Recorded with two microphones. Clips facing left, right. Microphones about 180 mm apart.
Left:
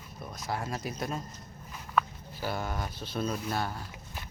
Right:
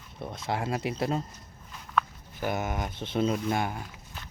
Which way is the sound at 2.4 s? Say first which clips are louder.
Right 4 dB; 20° right (ahead or behind).